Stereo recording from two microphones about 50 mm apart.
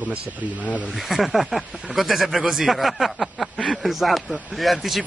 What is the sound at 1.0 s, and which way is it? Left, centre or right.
Speech, centre.